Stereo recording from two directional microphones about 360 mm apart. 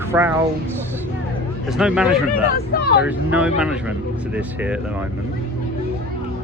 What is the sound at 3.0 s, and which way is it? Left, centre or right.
Speech, centre.